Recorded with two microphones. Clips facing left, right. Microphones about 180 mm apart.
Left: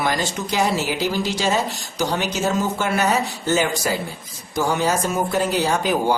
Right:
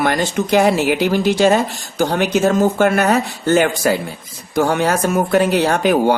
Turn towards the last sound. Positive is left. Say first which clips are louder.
# right 5 dB
turn(degrees=-65)  # may be behind; listen again after turning